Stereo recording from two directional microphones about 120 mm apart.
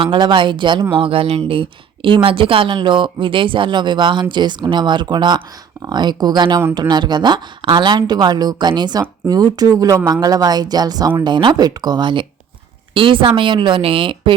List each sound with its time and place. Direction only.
0.0 s a woman's voice: 40° right (ahead or behind)